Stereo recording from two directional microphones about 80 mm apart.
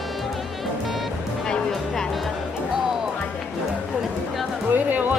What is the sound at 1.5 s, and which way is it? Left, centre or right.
Music, centre.